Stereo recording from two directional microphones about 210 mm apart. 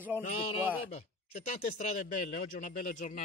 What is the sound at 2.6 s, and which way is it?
Speech, 35° left (ahead or behind).